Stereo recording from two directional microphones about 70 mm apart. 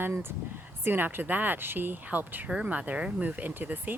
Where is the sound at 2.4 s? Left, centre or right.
Centre.